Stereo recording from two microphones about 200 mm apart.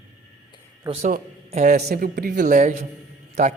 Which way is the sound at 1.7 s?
50° right (ahead or behind).